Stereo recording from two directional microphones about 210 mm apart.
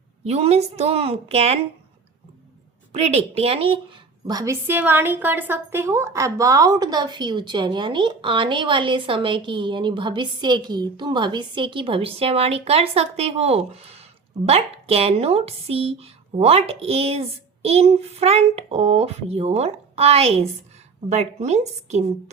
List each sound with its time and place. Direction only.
0.3 s a woman's voice: 30° right (ahead or behind)
2.9 s a woman's voice: 30° right (ahead or behind)